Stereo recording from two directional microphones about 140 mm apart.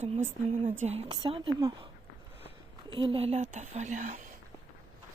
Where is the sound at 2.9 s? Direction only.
40° right (ahead or behind); by 4.3 s 65° right (ahead or behind).